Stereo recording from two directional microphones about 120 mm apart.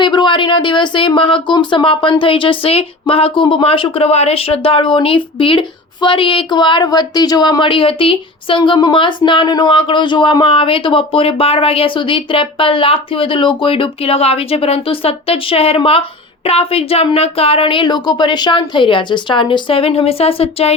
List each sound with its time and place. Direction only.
0.0 s speech: 40° left (ahead or behind); by 20.7 s 55° left (ahead or behind)